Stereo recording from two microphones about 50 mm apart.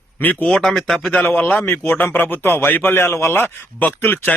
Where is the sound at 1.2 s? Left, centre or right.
Left.